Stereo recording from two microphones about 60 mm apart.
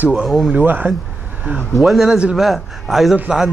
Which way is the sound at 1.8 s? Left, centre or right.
Centre.